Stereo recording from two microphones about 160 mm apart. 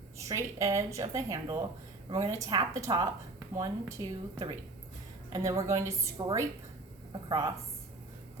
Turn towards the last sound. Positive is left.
turn(degrees=-25)  # may be behind; listen again after turning